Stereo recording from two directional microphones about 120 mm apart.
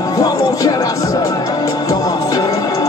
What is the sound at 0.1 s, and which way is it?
Music, 30° left (ahead or behind).